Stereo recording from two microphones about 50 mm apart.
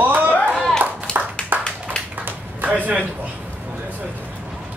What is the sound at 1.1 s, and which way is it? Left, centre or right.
Clapping, centre.